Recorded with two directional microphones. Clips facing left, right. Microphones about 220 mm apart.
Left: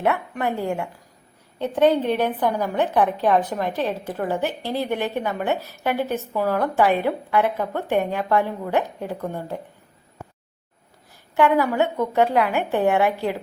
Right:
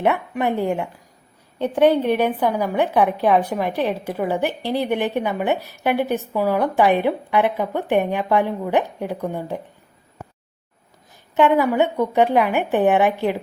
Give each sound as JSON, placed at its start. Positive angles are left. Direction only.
{"t": 0.0, "sound": "a woman's voice", "side_deg": -20}
{"t": 11.3, "sound": "a woman's voice", "side_deg": -20}